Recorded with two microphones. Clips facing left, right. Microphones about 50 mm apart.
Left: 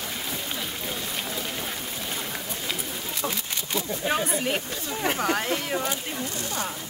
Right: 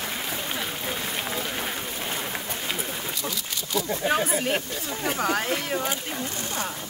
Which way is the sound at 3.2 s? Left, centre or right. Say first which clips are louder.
Left 1 dB; left.